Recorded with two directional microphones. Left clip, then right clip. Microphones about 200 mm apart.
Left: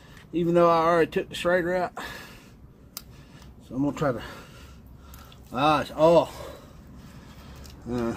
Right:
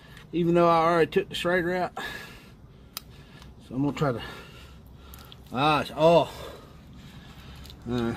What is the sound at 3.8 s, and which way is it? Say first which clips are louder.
Speech: left 1 dB; 50° right (ahead or behind).